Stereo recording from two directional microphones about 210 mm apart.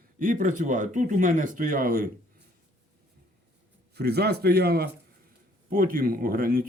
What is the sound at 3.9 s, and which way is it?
A man's voice, 50° right (ahead or behind).